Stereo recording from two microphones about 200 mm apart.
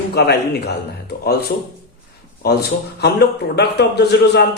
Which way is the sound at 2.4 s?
55° left (ahead or behind).